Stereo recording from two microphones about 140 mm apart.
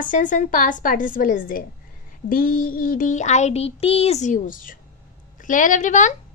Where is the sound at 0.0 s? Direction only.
70° left (ahead or behind); by 1.6 s 90° left.